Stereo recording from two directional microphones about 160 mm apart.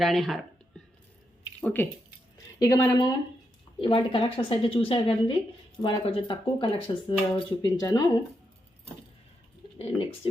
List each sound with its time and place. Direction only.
0.0 s speech: centre (ahead or behind)
1.6 s a woman's voice: 10° left (ahead or behind)
3.8 s speech: 35° left (ahead or behind)